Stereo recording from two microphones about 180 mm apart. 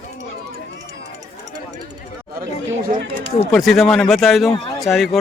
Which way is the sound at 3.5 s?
Centre (ahead or behind).